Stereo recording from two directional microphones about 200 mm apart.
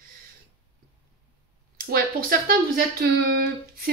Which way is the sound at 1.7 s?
45° right (ahead or behind).